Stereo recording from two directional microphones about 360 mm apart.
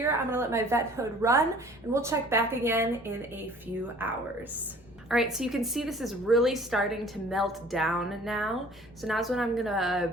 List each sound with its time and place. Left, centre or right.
0.0 s a woman's voice: centre